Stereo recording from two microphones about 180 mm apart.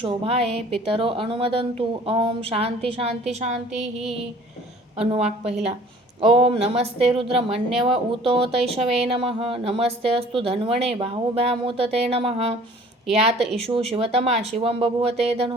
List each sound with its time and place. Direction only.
0.5 s speech: 35° right (ahead or behind)
4.9 s speech: 35° right (ahead or behind)